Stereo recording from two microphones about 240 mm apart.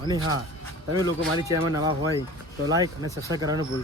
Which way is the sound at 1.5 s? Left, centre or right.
Centre.